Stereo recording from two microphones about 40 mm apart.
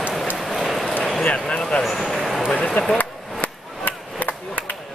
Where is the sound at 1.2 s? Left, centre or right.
Left.